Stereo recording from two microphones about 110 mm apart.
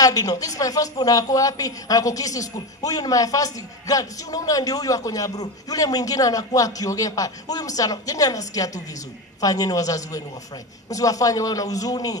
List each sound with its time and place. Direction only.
0.0 s a woman's voice: 35° left (ahead or behind)